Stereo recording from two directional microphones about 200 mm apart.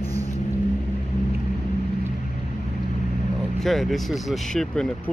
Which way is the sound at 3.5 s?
Centre (ahead or behind).